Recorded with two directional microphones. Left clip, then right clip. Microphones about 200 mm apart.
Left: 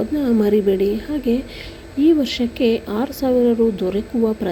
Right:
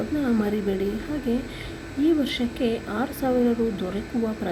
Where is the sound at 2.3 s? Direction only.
40° left (ahead or behind).